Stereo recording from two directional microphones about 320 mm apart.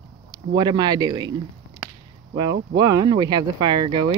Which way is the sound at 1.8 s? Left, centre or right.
Centre.